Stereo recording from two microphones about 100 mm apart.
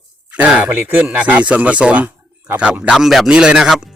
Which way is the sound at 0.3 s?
10° right (ahead or behind).